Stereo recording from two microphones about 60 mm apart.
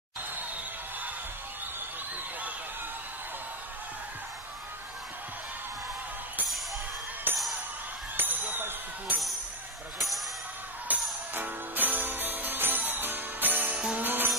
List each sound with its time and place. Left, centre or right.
7.3 s music: right
8.2 s a sound: right
10.9 s music: right